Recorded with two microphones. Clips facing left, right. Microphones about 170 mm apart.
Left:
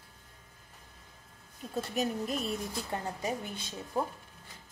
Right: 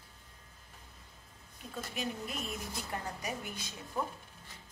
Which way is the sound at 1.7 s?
40° left (ahead or behind).